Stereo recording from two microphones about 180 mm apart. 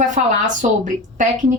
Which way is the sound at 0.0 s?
40° right (ahead or behind).